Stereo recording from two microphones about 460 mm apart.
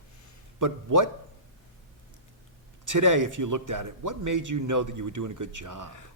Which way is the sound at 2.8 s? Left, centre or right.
Right.